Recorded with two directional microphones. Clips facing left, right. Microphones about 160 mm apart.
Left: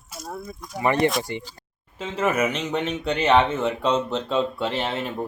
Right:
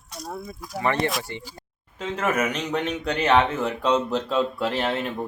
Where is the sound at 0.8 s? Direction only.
20° left (ahead or behind).